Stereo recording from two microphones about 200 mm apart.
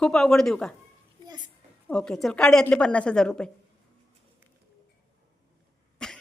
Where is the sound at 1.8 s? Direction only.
5° left (ahead or behind).